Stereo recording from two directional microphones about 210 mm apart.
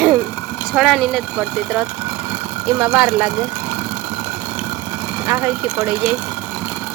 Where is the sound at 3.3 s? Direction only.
25° right (ahead or behind).